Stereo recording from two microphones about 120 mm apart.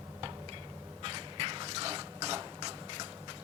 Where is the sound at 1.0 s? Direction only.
45° right (ahead or behind).